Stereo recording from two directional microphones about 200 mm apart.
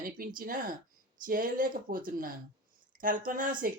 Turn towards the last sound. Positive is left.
turn(degrees=-45)  # may be behind; listen again after turning